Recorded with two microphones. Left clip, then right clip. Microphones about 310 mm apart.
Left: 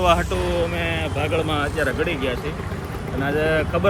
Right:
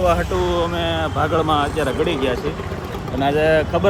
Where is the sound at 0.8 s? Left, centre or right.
Centre.